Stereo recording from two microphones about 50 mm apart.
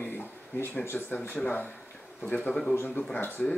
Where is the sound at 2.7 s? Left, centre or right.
Left.